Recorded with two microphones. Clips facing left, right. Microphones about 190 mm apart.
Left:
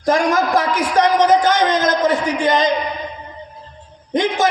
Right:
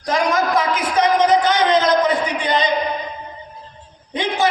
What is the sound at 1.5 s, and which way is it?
A man's voice, 45° left (ahead or behind).